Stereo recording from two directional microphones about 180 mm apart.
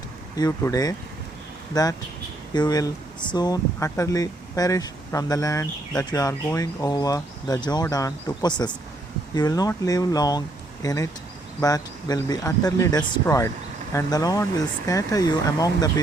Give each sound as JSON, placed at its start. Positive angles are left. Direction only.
{"t": 0.3, "sound": "speech", "side_deg": 20}